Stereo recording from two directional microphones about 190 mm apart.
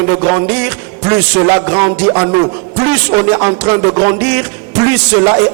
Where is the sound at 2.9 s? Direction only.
15° right (ahead or behind).